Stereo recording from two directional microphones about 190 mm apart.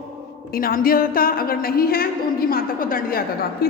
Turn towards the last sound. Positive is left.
turn(degrees=50)  # may be behind; listen again after turning